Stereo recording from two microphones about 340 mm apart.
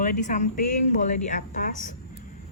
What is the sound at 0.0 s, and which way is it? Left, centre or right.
Speech, left.